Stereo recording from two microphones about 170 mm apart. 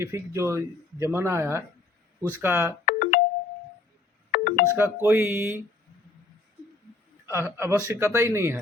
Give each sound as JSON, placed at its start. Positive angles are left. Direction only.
{"t": 0.0, "sound": "speech", "side_deg": -15}
{"t": 2.8, "sound": "music", "side_deg": 55}
{"t": 4.3, "sound": "music", "side_deg": 50}
{"t": 4.8, "sound": "speech", "side_deg": -15}
{"t": 7.3, "sound": "speech", "side_deg": -15}